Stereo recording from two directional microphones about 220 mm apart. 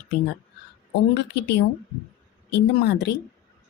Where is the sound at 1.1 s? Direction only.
50° left (ahead or behind).